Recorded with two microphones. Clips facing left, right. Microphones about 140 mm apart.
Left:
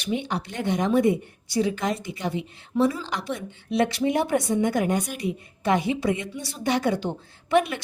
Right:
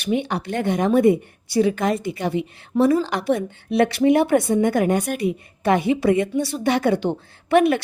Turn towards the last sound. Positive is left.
turn(degrees=-60)  # may be behind; listen again after turning